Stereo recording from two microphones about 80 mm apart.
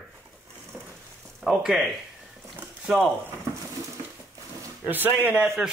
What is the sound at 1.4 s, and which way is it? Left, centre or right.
Speech, centre.